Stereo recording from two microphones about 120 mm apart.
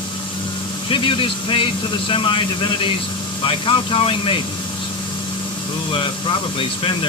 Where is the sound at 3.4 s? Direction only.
45° left (ahead or behind).